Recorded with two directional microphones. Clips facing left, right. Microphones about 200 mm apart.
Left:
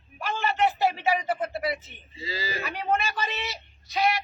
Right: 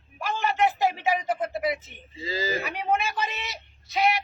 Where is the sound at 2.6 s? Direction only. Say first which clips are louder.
Right 1 dB; 20° right (ahead or behind).